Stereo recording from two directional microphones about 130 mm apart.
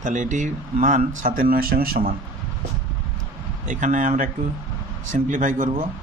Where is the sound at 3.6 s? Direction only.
80° right.